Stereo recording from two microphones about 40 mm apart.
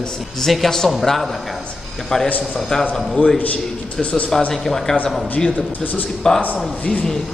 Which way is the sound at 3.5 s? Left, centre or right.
Left.